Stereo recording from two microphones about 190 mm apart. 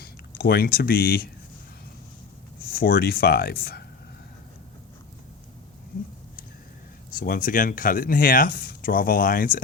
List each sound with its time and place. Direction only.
0.0 s speech: 55° left (ahead or behind)
2.6 s speech: 50° left (ahead or behind)
7.1 s speech: 45° left (ahead or behind)